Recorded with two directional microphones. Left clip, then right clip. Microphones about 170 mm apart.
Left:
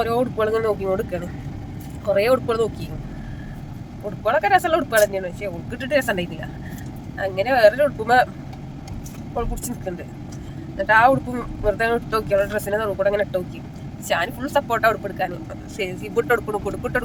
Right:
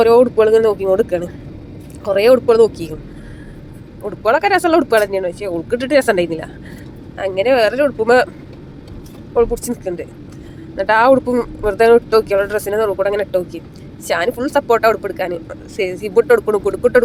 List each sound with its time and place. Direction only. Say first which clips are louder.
0.0 s speech: right 11 dB; 40° right (ahead or behind)
4.2 s speech: right 4 dB; 45° right (ahead or behind)
9.3 s speech: right 13 dB; 30° right (ahead or behind)
10.8 s speech: right 4 dB; 50° right (ahead or behind); by 16.4 s 35° right (ahead or behind)